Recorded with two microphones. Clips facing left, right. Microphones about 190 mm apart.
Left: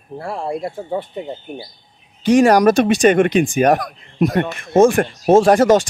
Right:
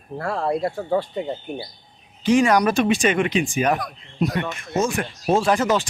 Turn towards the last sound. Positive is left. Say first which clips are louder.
# left 8 dB
turn(degrees=45)  # may be behind; listen again after turning